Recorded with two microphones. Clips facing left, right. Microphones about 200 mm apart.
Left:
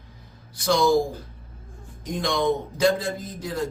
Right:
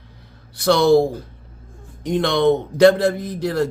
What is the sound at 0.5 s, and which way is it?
Speech, 65° right (ahead or behind).